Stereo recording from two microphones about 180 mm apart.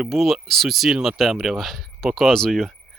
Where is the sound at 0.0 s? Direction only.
Centre (ahead or behind).